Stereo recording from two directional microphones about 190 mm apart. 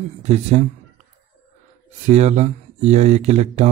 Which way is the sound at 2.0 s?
35° right (ahead or behind).